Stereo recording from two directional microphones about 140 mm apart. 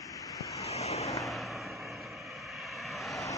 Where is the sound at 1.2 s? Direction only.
Centre (ahead or behind).